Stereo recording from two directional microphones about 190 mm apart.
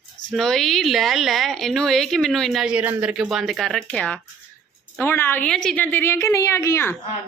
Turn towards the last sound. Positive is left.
turn(degrees=15)  # may be behind; listen again after turning